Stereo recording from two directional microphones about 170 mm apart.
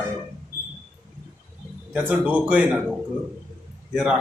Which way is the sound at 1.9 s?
5° right (ahead or behind).